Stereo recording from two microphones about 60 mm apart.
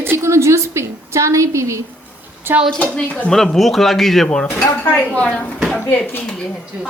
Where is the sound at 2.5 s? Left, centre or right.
Right.